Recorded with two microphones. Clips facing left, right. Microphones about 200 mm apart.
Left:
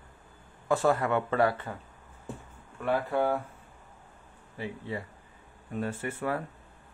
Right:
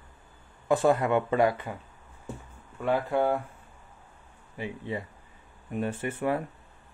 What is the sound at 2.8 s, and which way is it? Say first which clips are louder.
Speech: right 2 dB; 15° right (ahead or behind).